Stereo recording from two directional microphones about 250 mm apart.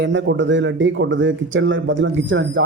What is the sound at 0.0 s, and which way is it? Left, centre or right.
Speech, right.